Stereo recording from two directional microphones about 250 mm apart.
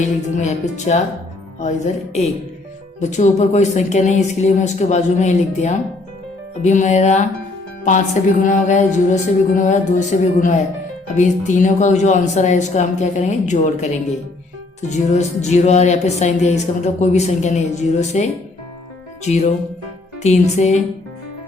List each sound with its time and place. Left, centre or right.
0.0 s speech: left